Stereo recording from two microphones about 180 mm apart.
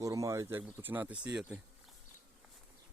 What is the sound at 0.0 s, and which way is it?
Speech, 20° right (ahead or behind).